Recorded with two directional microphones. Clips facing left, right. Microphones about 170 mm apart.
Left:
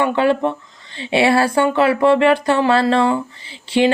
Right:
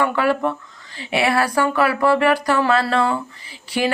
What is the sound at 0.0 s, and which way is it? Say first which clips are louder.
Speech: left 3 dB; 25° left (ahead or behind).